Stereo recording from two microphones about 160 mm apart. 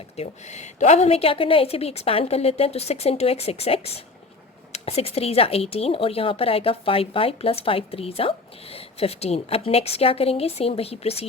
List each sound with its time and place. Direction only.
0.2 s speech: 45° left (ahead or behind)